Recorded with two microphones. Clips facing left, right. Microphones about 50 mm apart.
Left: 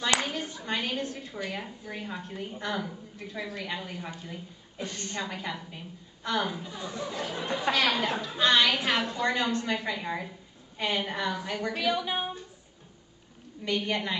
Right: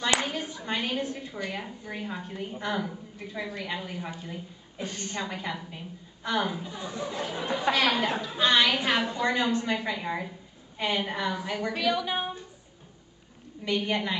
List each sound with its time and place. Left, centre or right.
0.2 s a woman's voice: centre
4.8 s a woman's voice: right
5.1 s a woman's voice: centre
13.7 s a woman's voice: centre